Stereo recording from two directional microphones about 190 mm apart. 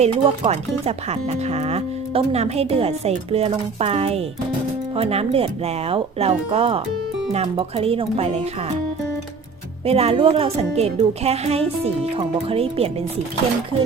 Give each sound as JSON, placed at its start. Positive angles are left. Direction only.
{"t": 0.0, "sound": "speech", "side_deg": -35}
{"t": 9.8, "sound": "speech", "side_deg": -30}